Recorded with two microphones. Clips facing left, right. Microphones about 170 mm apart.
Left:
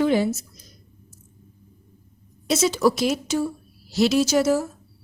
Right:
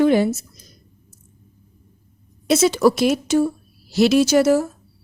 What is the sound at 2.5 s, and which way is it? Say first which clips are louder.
A woman's voice: right 4 dB; 60° right (ahead or behind).